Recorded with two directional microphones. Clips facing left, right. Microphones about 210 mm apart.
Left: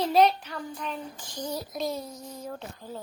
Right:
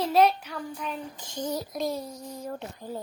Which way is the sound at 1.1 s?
20° right (ahead or behind).